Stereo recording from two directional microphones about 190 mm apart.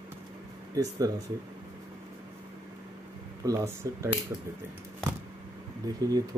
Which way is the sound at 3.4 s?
15° right (ahead or behind).